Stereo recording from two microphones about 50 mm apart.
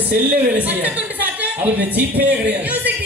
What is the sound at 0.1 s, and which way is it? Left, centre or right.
A woman's voice, right.